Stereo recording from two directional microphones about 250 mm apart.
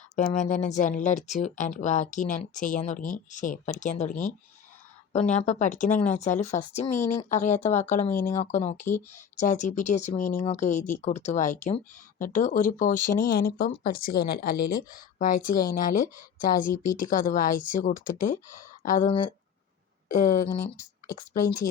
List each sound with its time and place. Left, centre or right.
0.3 s speech: left
19.0 s speech: centre
20.1 s speech: left